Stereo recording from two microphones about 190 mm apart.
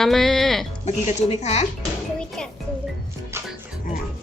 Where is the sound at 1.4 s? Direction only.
35° left (ahead or behind).